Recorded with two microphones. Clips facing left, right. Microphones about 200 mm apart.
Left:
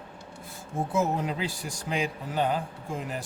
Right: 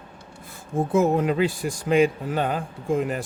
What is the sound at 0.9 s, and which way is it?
A man's voice, 60° right (ahead or behind).